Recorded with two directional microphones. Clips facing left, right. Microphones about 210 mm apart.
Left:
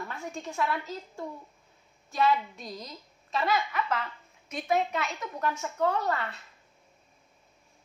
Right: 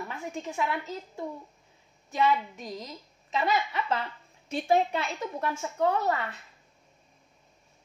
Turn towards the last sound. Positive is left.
turn(degrees=-20)  # may be behind; listen again after turning